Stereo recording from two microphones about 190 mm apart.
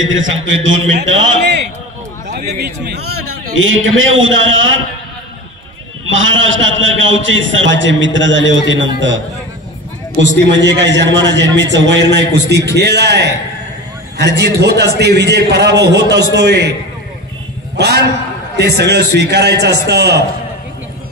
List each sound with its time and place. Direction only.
0.0 s a man's voice: 90° right
6.0 s a man's voice: 90° right
10.2 s a man's voice: 70° right (ahead or behind)
17.7 s a man's voice: 60° right (ahead or behind)